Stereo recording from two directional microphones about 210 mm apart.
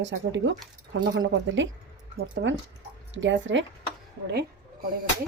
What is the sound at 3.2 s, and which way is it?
Speech, 60° right (ahead or behind).